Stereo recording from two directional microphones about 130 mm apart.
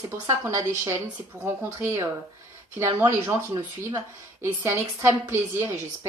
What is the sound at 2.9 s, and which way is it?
A woman's voice, 20° right (ahead or behind).